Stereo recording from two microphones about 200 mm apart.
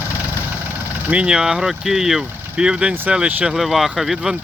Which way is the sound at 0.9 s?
10° right (ahead or behind).